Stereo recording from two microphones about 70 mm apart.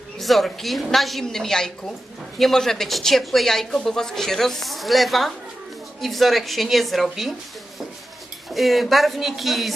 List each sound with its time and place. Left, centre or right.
0.2 s speech: centre
8.5 s speech: centre